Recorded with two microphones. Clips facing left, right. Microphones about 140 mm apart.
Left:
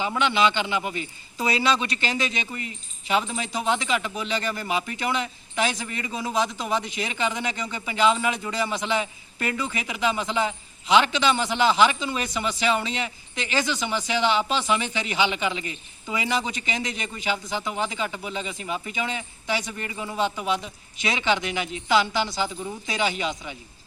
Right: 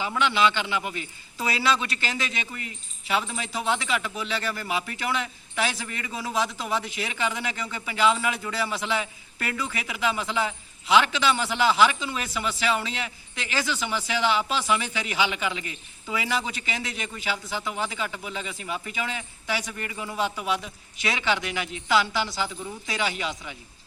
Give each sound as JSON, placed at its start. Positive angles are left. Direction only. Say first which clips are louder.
{"t": 0.2, "sound": "a man's voice", "louder": "even", "side_deg": 0}
{"t": 21.0, "sound": "speech", "louder": "left 1 dB", "side_deg": 20}
{"t": 21.2, "sound": "a man's voice", "louder": "left 3 dB", "side_deg": -5}